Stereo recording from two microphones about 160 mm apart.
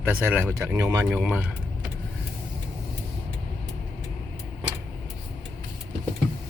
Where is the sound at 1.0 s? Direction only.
10° right (ahead or behind).